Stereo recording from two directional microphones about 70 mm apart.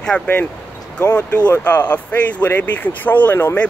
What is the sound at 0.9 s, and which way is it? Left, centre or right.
Speech, centre.